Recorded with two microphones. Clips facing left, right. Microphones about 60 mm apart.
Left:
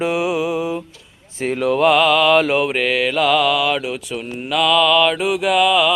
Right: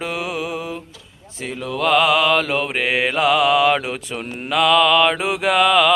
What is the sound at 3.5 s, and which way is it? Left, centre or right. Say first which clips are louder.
Mantra: right 2 dB; right.